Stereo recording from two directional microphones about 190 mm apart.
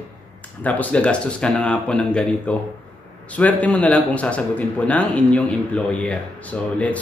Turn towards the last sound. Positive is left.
turn(degrees=5)  # may be behind; listen again after turning